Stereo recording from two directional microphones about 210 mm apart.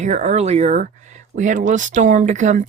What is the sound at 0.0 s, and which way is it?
Speech, 35° right (ahead or behind).